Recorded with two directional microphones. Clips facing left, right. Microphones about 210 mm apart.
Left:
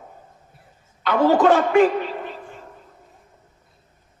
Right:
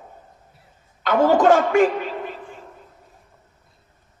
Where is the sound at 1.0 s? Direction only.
45° right (ahead or behind).